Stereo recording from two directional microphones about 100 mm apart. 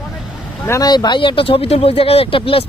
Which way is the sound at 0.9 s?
45° left (ahead or behind).